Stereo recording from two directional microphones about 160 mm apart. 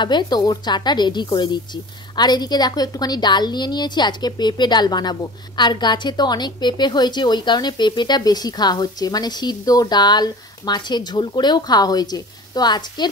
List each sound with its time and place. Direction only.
0.0 s a woman's voice: 25° left (ahead or behind)